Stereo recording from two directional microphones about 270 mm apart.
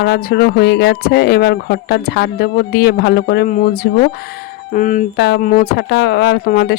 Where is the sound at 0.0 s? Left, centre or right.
Left.